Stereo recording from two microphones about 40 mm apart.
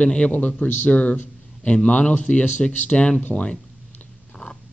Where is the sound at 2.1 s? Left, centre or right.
Left.